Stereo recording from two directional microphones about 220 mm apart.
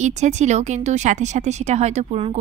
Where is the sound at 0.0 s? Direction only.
30° right (ahead or behind).